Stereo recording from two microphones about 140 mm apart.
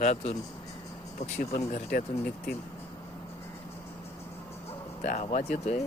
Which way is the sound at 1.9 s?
90° left.